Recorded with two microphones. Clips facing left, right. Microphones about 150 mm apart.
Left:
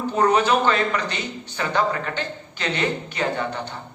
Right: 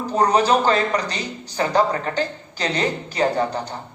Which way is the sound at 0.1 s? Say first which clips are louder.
Right 2 dB; 35° right (ahead or behind).